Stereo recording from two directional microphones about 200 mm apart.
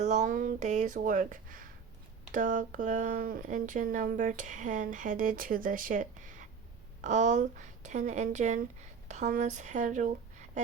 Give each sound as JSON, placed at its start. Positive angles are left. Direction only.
{"t": 0.0, "sound": "speech", "side_deg": -35}